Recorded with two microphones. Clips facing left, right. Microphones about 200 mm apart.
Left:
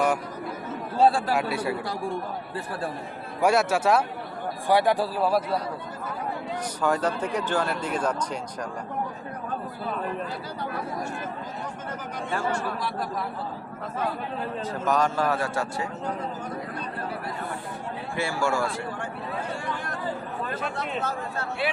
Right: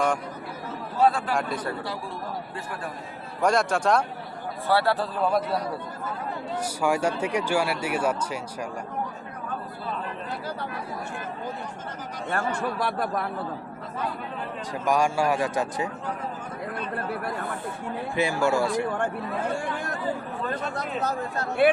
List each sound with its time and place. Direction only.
0.9 s speech: 30° left (ahead or behind)
1.3 s a man's voice: 5° left (ahead or behind)
3.4 s a man's voice: 5° left (ahead or behind)
6.8 s speech: 10° right (ahead or behind)
12.3 s a man's voice: 60° right (ahead or behind)
14.7 s speech: 10° right (ahead or behind)
18.2 s speech: 20° right (ahead or behind)
20.7 s speech: 40° right (ahead or behind)